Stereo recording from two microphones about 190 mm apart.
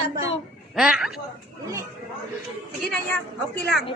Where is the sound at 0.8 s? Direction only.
5° right (ahead or behind).